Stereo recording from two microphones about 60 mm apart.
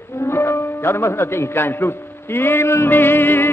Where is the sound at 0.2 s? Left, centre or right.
Left.